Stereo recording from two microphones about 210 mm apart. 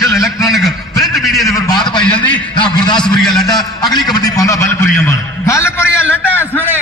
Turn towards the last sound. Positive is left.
turn(degrees=10)  # may be behind; listen again after turning